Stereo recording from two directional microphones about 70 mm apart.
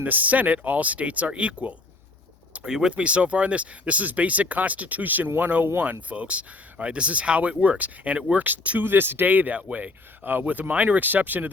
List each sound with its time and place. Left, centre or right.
0.0 s speech: right